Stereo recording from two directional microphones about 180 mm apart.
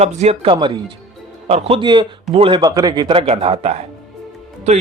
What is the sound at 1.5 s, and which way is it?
Speech, 35° right (ahead or behind).